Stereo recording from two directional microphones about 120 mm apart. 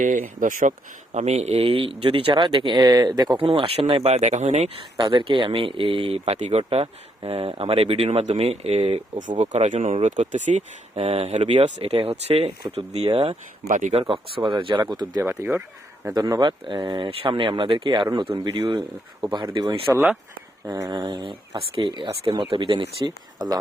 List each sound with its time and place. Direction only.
0.0 s speech: 90° right
1.1 s speech: 65° right (ahead or behind)
5.1 s speech: 45° right (ahead or behind); by 10.6 s 90° right
10.9 s speech: 55° right (ahead or behind)
13.7 s speech: 85° right
14.1 s speech: 45° right (ahead or behind)
15.2 s speech: 20° right (ahead or behind)
16.1 s speech: 35° right (ahead or behind)
19.9 s speech: 5° right (ahead or behind)
20.7 s speech: 30° right (ahead or behind)